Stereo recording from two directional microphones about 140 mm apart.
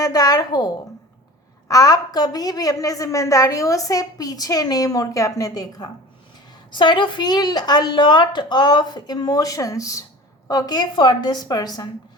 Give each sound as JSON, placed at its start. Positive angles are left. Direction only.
{"t": 0.0, "sound": "a woman's voice", "side_deg": 25}